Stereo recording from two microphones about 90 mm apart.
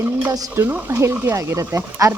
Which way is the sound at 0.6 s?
20° right (ahead or behind).